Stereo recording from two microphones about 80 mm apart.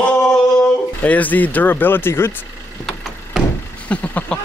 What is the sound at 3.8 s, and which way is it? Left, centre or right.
Male singing, centre.